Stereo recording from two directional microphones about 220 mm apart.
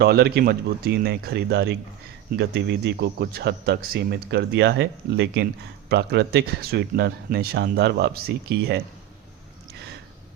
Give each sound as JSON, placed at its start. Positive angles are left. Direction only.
{"t": 0.0, "sound": "speech", "side_deg": -45}